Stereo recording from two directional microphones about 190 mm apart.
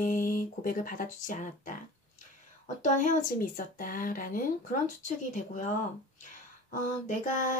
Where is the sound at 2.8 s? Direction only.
40° left (ahead or behind).